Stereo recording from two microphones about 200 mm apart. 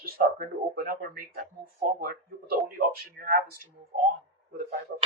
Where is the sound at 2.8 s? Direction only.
45° right (ahead or behind).